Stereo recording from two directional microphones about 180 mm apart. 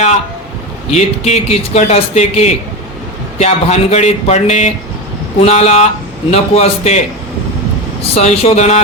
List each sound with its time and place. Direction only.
0.9 s speech: 35° left (ahead or behind)
8.0 s speech: 35° left (ahead or behind)